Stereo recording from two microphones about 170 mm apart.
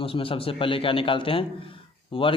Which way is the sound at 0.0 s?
35° left (ahead or behind).